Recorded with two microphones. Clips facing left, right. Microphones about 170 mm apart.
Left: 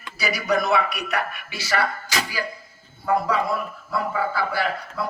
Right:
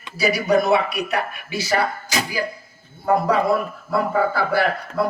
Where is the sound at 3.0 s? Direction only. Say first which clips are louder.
Right 4 dB; 55° right (ahead or behind).